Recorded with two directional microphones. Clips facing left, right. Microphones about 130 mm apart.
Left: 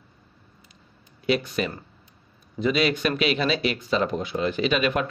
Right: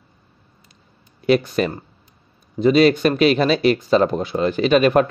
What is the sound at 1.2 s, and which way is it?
Speech, 45° right (ahead or behind).